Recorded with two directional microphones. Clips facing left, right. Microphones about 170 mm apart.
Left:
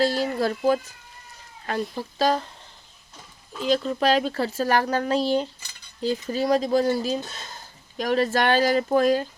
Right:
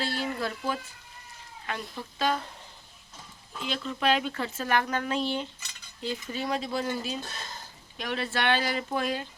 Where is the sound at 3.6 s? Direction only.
40° left (ahead or behind).